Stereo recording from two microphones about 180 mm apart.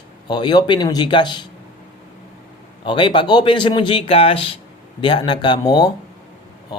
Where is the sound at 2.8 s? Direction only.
25° left (ahead or behind).